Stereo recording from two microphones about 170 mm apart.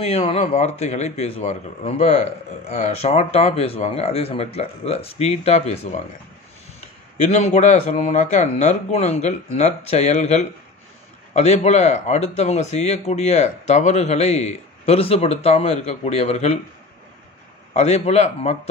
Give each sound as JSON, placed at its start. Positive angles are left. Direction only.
{"t": 0.0, "sound": "a man's voice", "side_deg": 35}
{"t": 7.2, "sound": "a man's voice", "side_deg": 40}
{"t": 17.7, "sound": "a man's voice", "side_deg": 40}